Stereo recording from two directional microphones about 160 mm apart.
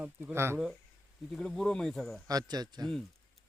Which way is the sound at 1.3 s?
5° left (ahead or behind).